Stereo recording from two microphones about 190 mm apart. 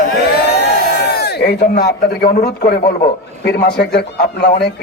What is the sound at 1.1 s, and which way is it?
A man's voice, 55° left (ahead or behind).